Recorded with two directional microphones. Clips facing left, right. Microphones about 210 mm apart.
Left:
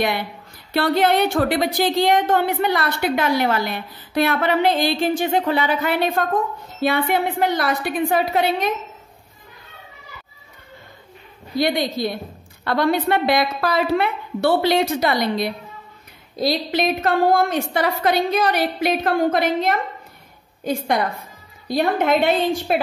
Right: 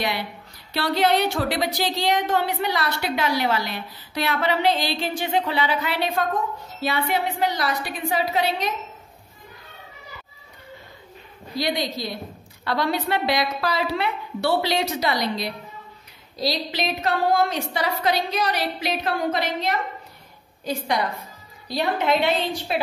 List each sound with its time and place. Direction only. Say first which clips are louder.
0.7 s a woman's voice: left 4 dB; 50° left (ahead or behind)
11.5 s a woman's voice: left 5 dB; 55° left (ahead or behind)